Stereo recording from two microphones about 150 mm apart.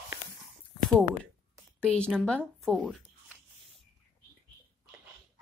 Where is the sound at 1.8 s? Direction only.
10° left (ahead or behind).